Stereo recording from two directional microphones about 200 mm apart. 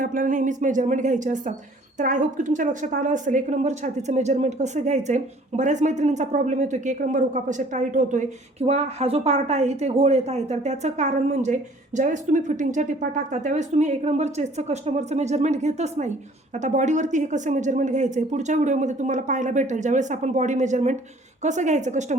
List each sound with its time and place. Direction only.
0.0 s a woman's voice: 40° right (ahead or behind)